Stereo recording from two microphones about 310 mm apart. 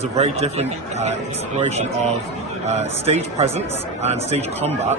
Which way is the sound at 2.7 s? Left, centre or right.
Right.